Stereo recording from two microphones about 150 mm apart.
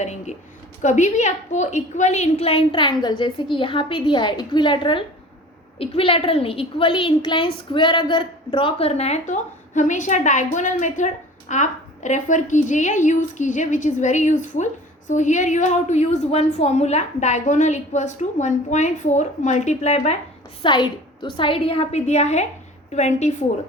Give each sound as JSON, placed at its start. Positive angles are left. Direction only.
{"t": 0.0, "sound": "a woman's voice", "side_deg": 50}
{"t": 20.6, "sound": "a woman's voice", "side_deg": 30}